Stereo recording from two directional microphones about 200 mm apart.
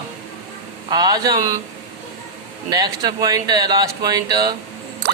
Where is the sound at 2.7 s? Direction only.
20° right (ahead or behind).